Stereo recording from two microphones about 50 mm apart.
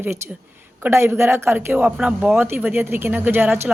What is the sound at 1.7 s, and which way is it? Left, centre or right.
A woman's voice, right.